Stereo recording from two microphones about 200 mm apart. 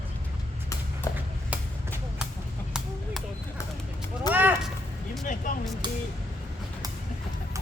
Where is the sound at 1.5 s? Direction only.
5° right (ahead or behind).